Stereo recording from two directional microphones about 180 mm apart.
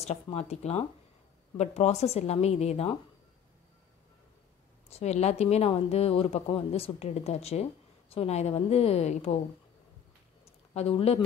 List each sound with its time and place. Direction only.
0.0 s speech: 35° left (ahead or behind)
4.8 s speech: 35° left (ahead or behind)
10.4 s a sound: 35° left (ahead or behind)